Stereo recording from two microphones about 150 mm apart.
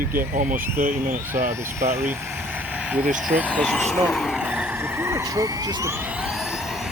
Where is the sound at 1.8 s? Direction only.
15° right (ahead or behind).